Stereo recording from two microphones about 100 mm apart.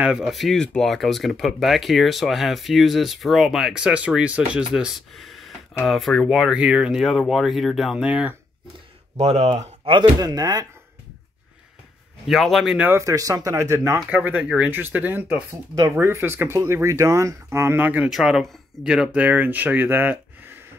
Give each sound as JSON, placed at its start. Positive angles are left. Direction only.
{"t": 0.0, "sound": "speech", "side_deg": -5}
{"t": 5.1, "sound": "a sound", "side_deg": 0}
{"t": 5.9, "sound": "speech", "side_deg": 0}
{"t": 7.0, "sound": "speech", "side_deg": 0}
{"t": 9.2, "sound": "speech", "side_deg": -90}
{"t": 9.9, "sound": "speech", "side_deg": -40}
{"t": 12.3, "sound": "speech", "side_deg": 0}
{"t": 12.7, "sound": "speech", "side_deg": -20}
{"t": 13.0, "sound": "speech", "side_deg": -35}
{"t": 14.1, "sound": "speech", "side_deg": -15}
{"t": 15.7, "sound": "speech", "side_deg": -30}
{"t": 18.1, "sound": "speech", "side_deg": -5}